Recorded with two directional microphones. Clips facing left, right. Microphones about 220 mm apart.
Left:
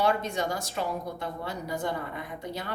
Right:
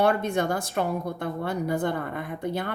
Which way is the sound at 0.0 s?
55° right (ahead or behind).